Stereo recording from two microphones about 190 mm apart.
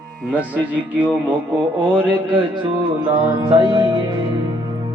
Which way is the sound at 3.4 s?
25° right (ahead or behind).